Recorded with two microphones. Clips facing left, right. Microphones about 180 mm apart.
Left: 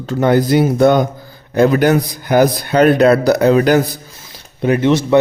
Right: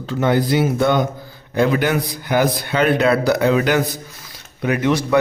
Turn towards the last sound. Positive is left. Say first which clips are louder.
# left 5 dB
turn(degrees=25)  # may be behind; listen again after turning